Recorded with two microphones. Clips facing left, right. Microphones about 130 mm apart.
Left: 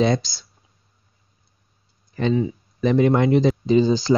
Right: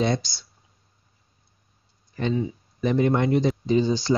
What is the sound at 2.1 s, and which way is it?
Speech, 90° left.